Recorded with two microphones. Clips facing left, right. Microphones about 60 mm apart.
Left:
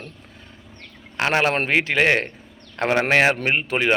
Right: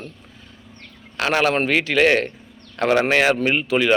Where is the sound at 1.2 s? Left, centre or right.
Left.